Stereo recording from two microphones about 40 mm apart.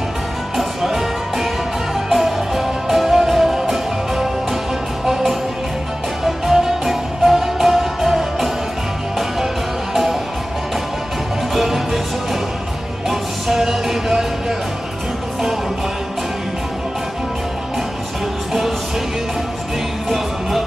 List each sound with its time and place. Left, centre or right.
0.6 s music: centre
11.5 s music: centre
13.1 s music: centre